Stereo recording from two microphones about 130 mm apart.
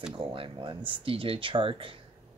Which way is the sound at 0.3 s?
40° right (ahead or behind).